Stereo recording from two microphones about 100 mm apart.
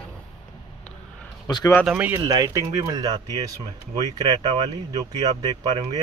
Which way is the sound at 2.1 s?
40° right (ahead or behind).